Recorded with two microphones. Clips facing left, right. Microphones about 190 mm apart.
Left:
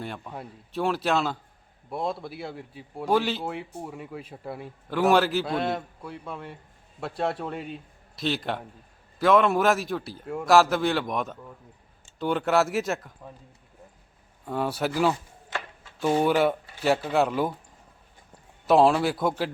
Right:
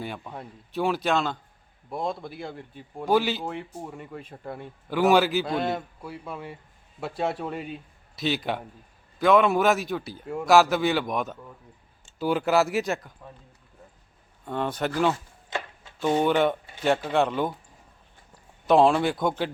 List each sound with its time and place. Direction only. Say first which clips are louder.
0.0 s speech: even; centre (ahead or behind)
14.4 s speech: even; 5° left (ahead or behind)
18.6 s speech: even; 5° left (ahead or behind)